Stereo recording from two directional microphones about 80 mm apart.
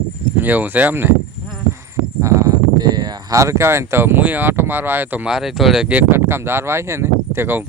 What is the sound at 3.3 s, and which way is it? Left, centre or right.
Speech, right.